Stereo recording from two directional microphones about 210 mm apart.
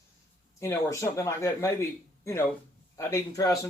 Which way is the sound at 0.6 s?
15° left (ahead or behind).